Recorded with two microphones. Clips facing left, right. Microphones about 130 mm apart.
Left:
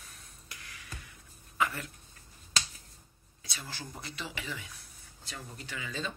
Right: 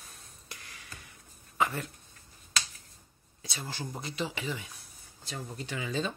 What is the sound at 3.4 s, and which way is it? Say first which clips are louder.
Speech: right 5 dB; 25° right (ahead or behind).